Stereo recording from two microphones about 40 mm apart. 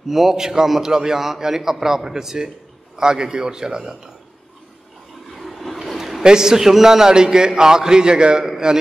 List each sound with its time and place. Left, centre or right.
0.1 s a man's voice: centre
5.3 s a sound: centre
6.2 s a man's voice: centre